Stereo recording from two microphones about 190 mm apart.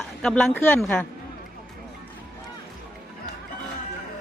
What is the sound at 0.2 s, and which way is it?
Speech, 5° left (ahead or behind).